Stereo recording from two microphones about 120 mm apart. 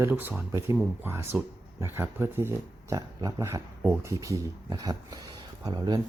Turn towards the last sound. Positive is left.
turn(degrees=-35)  # may be behind; listen again after turning